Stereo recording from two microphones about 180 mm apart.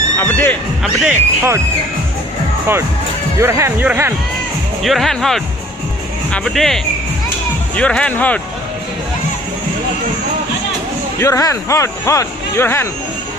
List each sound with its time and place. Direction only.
0.2 s speech: 10° left (ahead or behind)
0.8 s speech: 10° right (ahead or behind)
3.3 s speech: 15° right (ahead or behind)
4.8 s speech: centre (ahead or behind)
11.1 s speech: 15° left (ahead or behind)